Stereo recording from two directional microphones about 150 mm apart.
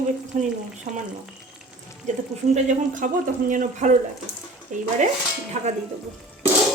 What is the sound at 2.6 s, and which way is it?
Speech, 55° right (ahead or behind).